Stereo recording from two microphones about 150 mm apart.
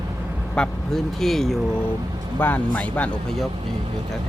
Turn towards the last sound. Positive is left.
turn(degrees=10)  # may be behind; listen again after turning